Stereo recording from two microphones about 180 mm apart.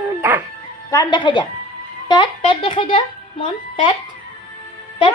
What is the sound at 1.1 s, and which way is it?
A child's voice, 25° left (ahead or behind).